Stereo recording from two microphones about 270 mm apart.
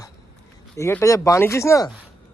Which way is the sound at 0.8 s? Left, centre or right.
Centre.